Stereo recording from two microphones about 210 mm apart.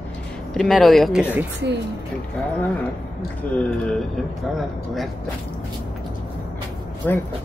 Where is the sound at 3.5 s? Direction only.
5° left (ahead or behind).